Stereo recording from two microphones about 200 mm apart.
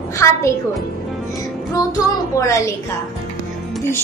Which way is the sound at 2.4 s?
15° left (ahead or behind).